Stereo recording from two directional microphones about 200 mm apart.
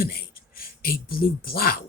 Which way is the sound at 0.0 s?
50° left (ahead or behind).